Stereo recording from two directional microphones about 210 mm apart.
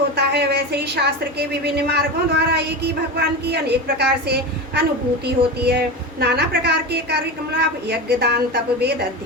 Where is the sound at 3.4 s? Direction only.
50° right (ahead or behind).